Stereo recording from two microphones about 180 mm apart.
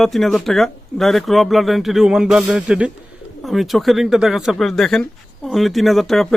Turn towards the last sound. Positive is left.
turn(degrees=0)  # may be behind; listen again after turning